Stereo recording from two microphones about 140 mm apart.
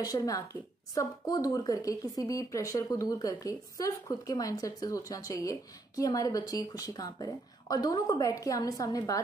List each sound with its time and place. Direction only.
0.0 s a woman's voice: 25° left (ahead or behind)